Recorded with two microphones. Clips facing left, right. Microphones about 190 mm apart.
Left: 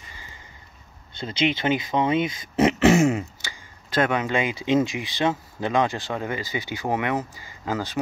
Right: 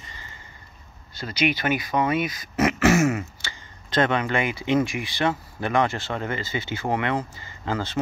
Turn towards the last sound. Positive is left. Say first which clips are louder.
# even
turn(degrees=15)  # may be behind; listen again after turning